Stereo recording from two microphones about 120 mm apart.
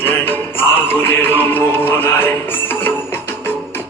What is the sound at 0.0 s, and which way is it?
Music, 15° left (ahead or behind).